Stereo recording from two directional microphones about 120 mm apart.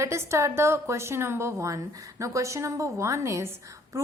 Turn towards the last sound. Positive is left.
turn(degrees=-25)  # may be behind; listen again after turning